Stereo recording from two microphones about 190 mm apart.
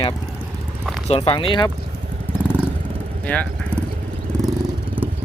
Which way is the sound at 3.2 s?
5° left (ahead or behind).